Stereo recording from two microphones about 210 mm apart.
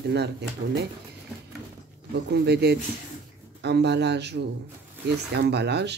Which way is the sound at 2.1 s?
50° right (ahead or behind).